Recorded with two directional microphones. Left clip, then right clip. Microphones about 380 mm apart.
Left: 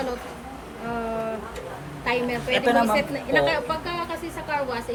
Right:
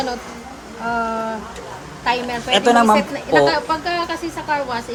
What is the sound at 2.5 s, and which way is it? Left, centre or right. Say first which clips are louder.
A woman's voice: right 7 dB; centre.